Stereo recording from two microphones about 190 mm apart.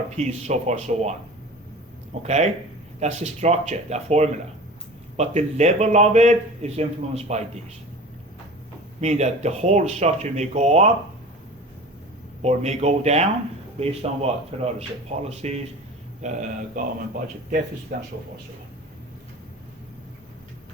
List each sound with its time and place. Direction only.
0.2 s speech: 35° right (ahead or behind)
2.2 s speech: 35° right (ahead or behind)
9.0 s speech: 35° right (ahead or behind)
12.4 s speech: 35° right (ahead or behind)
16.2 s speech: 45° right (ahead or behind)